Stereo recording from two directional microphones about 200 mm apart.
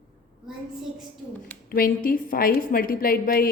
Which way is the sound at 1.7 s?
45° left (ahead or behind).